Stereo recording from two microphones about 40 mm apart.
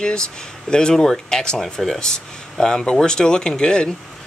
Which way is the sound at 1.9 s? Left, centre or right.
Centre.